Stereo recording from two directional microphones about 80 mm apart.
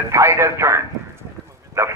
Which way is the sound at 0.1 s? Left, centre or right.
Right.